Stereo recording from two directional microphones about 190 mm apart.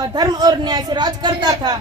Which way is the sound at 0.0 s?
20° right (ahead or behind).